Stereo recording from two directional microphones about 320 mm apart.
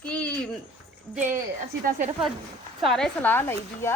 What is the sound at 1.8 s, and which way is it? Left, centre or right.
Speech, right.